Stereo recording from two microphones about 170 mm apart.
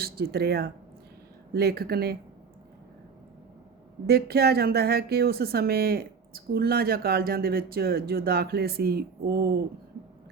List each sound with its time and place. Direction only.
0.0 s speech: 65° right (ahead or behind)
4.0 s speech: 70° right (ahead or behind)